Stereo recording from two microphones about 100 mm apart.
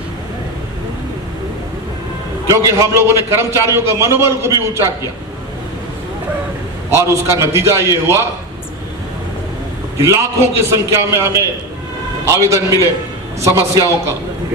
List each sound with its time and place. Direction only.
2.5 s a man's voice: 30° right (ahead or behind)
6.9 s a man's voice: 30° right (ahead or behind)
10.0 s a man's voice: 25° right (ahead or behind)